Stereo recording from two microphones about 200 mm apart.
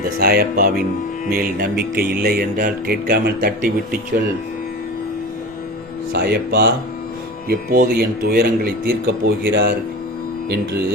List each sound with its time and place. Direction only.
0.2 s speech: 50° right (ahead or behind)
6.1 s speech: 50° right (ahead or behind)